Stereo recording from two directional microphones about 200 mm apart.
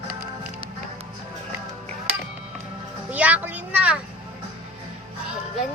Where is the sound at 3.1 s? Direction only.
5° right (ahead or behind).